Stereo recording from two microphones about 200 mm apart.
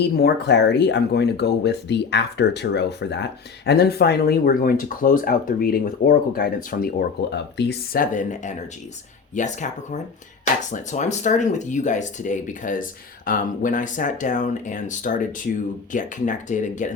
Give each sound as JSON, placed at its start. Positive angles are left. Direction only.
{"t": 0.0, "sound": "speech", "side_deg": 55}
{"t": 7.3, "sound": "speech", "side_deg": 60}